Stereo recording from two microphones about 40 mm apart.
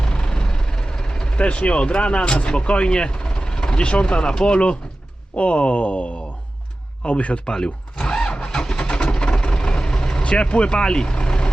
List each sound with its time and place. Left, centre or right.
0.0 s vehicle: left
1.4 s speech: left
7.4 s speech: centre
7.9 s vehicle: left
8.8 s vehicle: left